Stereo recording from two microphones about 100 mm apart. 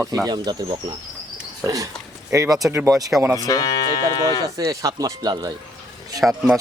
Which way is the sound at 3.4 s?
35° left (ahead or behind).